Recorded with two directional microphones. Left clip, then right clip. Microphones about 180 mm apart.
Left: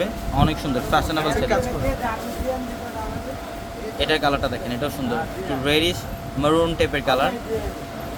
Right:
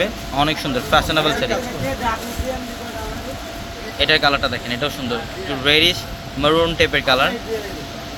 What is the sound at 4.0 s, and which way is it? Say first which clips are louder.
Speech: right 5 dB; 15° right (ahead or behind).